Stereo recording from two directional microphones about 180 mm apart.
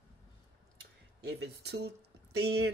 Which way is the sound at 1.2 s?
65° right (ahead or behind).